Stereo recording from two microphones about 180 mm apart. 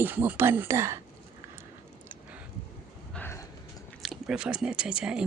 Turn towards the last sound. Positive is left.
turn(degrees=-5)  # may be behind; listen again after turning